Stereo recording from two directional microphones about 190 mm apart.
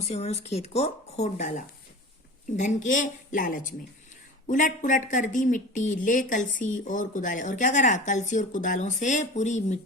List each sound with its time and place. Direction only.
0.0 s a woman's voice: 35° left (ahead or behind)